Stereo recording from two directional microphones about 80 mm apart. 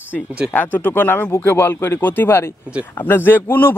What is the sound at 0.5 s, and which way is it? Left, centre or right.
Speech, left.